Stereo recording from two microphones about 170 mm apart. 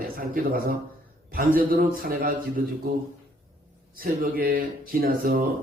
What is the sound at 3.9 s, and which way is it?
A man's voice, 55° right (ahead or behind).